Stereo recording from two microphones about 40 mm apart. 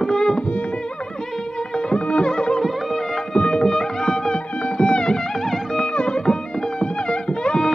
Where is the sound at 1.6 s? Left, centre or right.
Centre.